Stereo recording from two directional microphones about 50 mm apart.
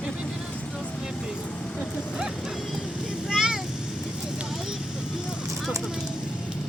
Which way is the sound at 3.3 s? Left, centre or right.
Centre.